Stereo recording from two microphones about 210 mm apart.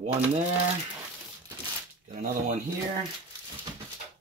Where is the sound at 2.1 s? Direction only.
35° right (ahead or behind).